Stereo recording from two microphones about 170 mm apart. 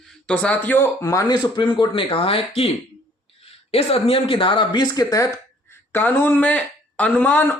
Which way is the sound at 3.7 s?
35° left (ahead or behind).